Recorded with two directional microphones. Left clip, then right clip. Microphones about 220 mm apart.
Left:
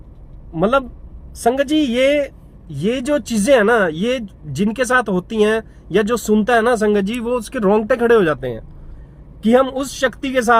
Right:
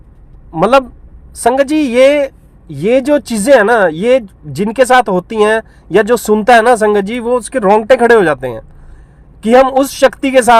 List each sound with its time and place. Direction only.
0.5 s speech: 25° right (ahead or behind)